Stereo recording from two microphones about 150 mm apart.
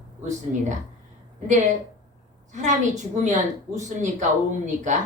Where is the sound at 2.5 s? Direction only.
55° right (ahead or behind).